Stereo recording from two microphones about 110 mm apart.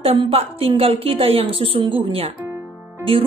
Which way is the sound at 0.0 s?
60° right (ahead or behind).